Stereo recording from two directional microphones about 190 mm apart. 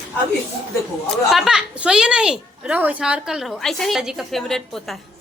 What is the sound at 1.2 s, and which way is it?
A woman's voice, centre (ahead or behind).